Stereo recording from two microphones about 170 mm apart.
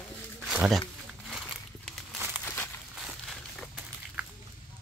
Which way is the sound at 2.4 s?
10° left (ahead or behind).